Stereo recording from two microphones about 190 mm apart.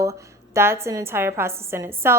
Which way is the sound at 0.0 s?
15° right (ahead or behind).